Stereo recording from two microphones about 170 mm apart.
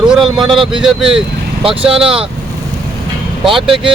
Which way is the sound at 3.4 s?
30° right (ahead or behind).